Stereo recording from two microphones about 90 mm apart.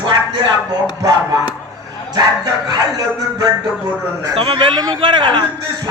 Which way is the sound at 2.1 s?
45° right (ahead or behind).